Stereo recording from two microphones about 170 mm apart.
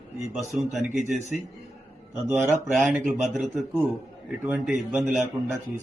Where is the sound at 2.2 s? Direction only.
10° right (ahead or behind).